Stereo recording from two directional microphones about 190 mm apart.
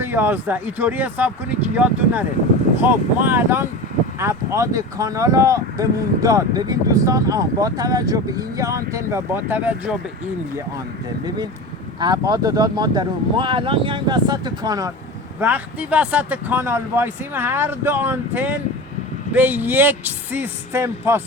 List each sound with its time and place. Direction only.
0.0 s speech: 10° right (ahead or behind)
11.9 s speech: 20° right (ahead or behind)